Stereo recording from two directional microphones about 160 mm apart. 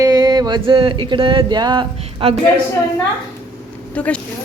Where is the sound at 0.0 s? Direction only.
25° right (ahead or behind).